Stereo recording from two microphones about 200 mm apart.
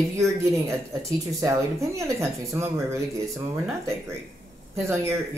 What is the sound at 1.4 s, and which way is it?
Speech, 15° right (ahead or behind).